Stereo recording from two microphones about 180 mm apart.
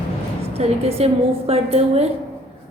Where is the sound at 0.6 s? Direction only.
35° right (ahead or behind).